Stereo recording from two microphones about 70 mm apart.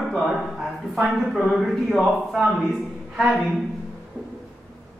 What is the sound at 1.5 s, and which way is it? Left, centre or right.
A man's voice, centre.